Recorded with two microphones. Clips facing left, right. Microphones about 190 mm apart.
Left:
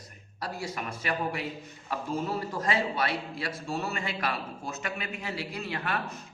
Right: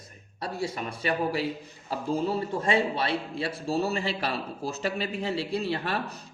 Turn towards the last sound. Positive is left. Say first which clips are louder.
# right 5 dB
turn(degrees=-30)  # may be behind; listen again after turning